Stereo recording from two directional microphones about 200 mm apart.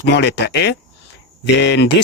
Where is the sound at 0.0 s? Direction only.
55° left (ahead or behind).